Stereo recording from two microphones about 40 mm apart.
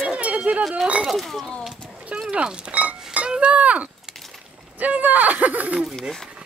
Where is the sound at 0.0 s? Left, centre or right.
Right.